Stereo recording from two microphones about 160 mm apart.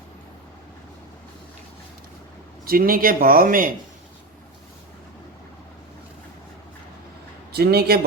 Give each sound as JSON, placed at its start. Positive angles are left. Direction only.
{"t": 2.6, "sound": "a man's voice", "side_deg": -65}
{"t": 7.5, "sound": "speech", "side_deg": -85}